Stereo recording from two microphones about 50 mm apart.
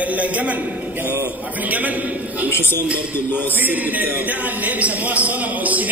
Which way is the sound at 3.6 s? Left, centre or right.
Right.